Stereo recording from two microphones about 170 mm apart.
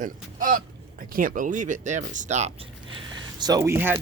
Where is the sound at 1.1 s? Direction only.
55° right (ahead or behind).